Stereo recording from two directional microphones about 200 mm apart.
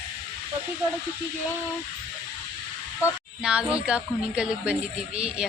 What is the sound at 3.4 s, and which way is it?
Speech, 5° right (ahead or behind).